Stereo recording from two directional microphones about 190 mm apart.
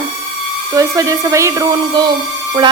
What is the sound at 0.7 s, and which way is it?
Speech, 20° right (ahead or behind).